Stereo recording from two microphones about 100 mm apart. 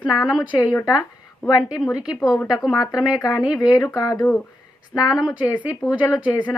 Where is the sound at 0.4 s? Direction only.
45° left (ahead or behind).